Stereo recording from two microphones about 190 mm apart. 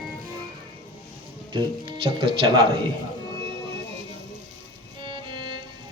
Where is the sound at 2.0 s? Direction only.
25° right (ahead or behind).